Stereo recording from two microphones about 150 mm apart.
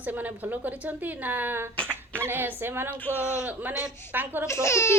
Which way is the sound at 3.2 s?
15° left (ahead or behind).